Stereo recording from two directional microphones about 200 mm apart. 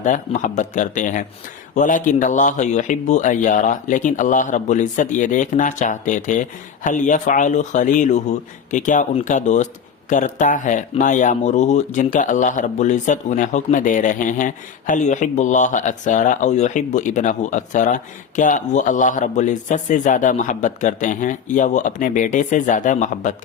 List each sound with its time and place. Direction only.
0.0 s speech: 40° left (ahead or behind)